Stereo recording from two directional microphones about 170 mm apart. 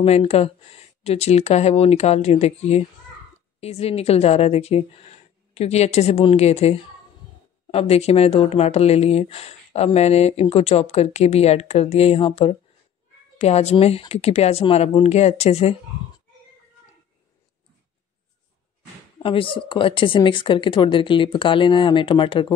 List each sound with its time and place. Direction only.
0.0 s speech: 40° left (ahead or behind)
19.2 s speech: 30° left (ahead or behind)